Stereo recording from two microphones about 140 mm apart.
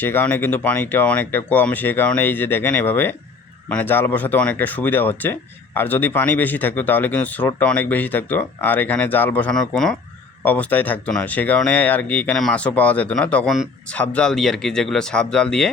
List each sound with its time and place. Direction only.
0.0 s speech: 15° left (ahead or behind)